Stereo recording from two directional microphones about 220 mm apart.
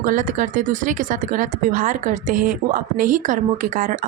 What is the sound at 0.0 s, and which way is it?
Speech, 40° right (ahead or behind).